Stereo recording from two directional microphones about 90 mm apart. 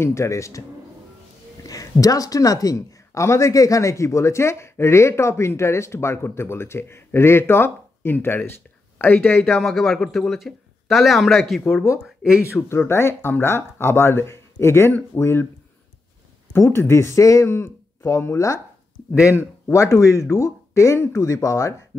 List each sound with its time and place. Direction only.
0.0 s speech: 30° left (ahead or behind)
1.7 s speech: 40° left (ahead or behind); by 9.4 s 20° left (ahead or behind)
9.6 s speech: centre (ahead or behind)
11.6 s speech: 25° left (ahead or behind)
16.5 s speech: 30° left (ahead or behind)